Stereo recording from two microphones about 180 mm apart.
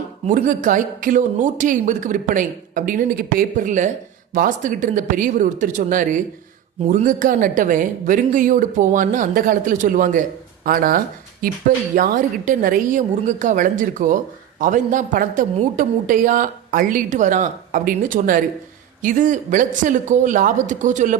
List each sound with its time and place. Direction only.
0.3 s a woman's voice: 45° right (ahead or behind)